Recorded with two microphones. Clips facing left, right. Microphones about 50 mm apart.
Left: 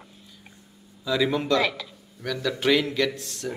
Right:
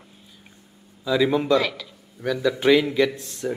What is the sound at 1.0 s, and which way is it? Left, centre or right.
Speech, centre.